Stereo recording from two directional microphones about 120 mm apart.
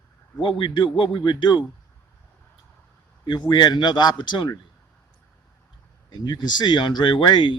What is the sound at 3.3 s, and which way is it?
Speech, 35° left (ahead or behind).